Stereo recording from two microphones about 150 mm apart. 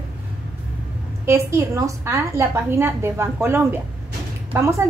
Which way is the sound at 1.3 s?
20° right (ahead or behind).